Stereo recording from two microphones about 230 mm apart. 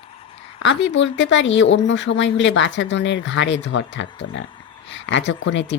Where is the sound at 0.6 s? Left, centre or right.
Left.